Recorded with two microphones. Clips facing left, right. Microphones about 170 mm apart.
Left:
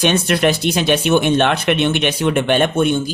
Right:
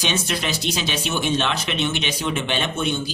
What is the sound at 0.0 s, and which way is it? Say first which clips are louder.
Speech: left 10 dB; 55° left (ahead or behind).